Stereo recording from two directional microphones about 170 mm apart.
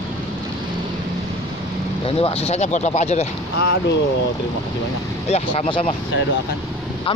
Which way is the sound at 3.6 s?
90° left.